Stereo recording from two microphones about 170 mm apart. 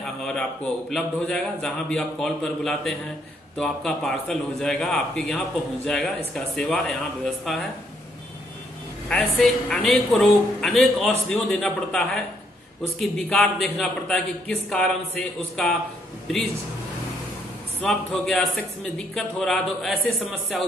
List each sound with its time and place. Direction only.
0.0 s a man's voice: 5° left (ahead or behind)
9.1 s a man's voice: centre (ahead or behind)
17.8 s a man's voice: centre (ahead or behind)